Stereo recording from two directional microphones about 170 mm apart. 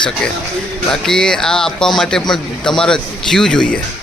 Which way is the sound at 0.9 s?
5° left (ahead or behind).